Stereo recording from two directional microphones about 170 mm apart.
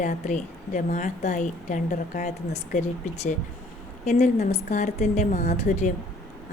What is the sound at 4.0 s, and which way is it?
A woman's voice, 45° left (ahead or behind).